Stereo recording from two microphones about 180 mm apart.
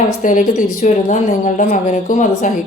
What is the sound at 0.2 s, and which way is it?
A woman's voice, 45° left (ahead or behind).